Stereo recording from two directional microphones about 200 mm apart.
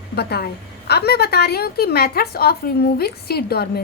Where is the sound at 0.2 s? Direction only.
55° left (ahead or behind).